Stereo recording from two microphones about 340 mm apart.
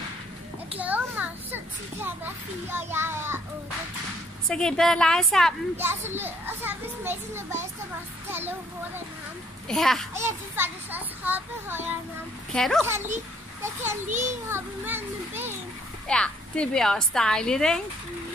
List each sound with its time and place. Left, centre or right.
0.7 s children playing: centre
4.5 s a child's voice: centre
14.0 s a child's voice: right
14.5 s a child's voice: centre
16.1 s a child's voice: centre